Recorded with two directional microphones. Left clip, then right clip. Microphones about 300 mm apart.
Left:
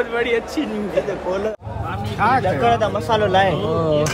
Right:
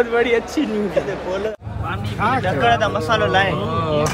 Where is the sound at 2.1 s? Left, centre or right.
Centre.